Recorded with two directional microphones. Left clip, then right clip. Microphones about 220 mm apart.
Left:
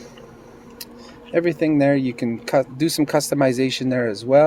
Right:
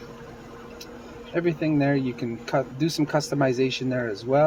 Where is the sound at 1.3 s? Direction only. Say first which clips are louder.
Left 6 dB; 55° left (ahead or behind).